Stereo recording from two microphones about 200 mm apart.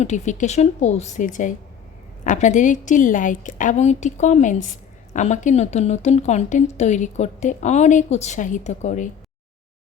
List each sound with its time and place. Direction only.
0.0 s a woman's voice: 35° left (ahead or behind)